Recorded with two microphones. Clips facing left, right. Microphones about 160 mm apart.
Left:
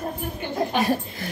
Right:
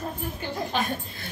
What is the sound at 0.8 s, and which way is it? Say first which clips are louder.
Speech: left 6 dB; 90° left.